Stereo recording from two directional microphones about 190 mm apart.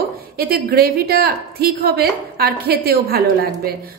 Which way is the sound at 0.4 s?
55° right (ahead or behind).